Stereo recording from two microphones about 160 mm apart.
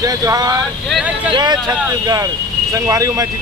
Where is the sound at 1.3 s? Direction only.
25° right (ahead or behind).